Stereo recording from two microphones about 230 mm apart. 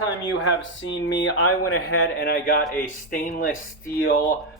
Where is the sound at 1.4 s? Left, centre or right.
Left.